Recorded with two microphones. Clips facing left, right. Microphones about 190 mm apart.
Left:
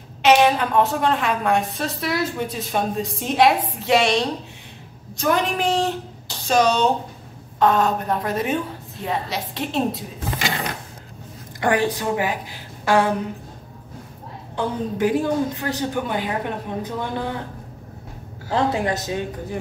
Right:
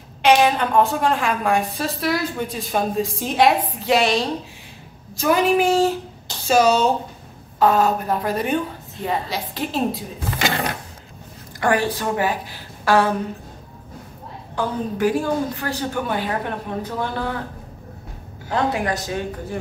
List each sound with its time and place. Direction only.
0.2 s a woman's voice: centre (ahead or behind)
11.6 s a woman's voice: 20° left (ahead or behind)
14.5 s a woman's voice: 20° left (ahead or behind)
18.5 s a woman's voice: 25° left (ahead or behind)